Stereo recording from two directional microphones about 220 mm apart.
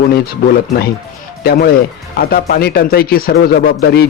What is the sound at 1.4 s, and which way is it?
Speech, 45° left (ahead or behind).